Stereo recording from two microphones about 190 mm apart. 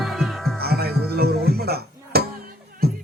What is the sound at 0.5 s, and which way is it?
Music, 55° right (ahead or behind).